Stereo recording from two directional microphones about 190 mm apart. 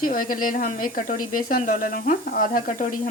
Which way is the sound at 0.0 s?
45° left (ahead or behind).